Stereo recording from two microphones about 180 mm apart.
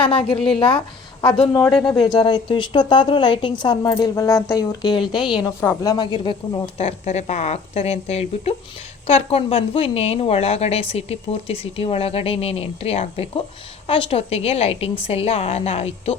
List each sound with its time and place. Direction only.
0.3 s a woman's voice: 5° left (ahead or behind)
1.2 s a woman's voice: 25° left (ahead or behind)